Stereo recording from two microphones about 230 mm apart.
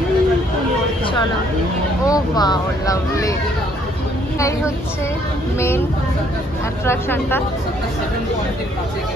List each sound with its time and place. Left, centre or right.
2.0 s speech: centre
6.9 s speech: centre